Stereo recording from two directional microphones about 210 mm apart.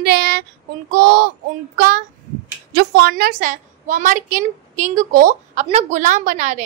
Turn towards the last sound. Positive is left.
turn(degrees=-35)  # may be behind; listen again after turning